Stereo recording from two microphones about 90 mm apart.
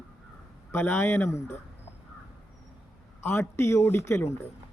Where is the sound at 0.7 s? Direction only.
25° left (ahead or behind).